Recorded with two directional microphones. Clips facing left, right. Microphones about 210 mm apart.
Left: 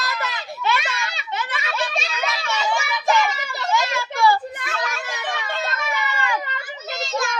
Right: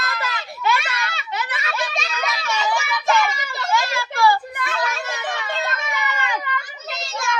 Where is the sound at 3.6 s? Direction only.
20° left (ahead or behind).